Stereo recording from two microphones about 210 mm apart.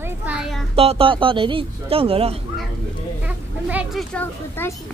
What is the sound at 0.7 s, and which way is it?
Speech, 25° right (ahead or behind).